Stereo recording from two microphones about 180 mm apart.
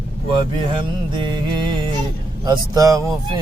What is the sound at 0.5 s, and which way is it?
Mantra, 25° right (ahead or behind).